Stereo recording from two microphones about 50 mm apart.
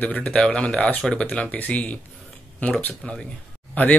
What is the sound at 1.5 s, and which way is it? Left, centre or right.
Speech, left.